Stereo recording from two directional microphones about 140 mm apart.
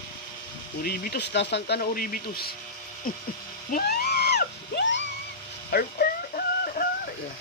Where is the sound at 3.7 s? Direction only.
85° left.